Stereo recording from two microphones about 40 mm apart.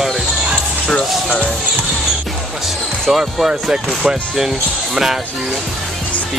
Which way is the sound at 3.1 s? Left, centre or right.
Centre.